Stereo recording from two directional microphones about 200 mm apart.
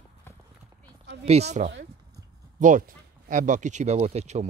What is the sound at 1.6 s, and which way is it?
Speech, 35° right (ahead or behind).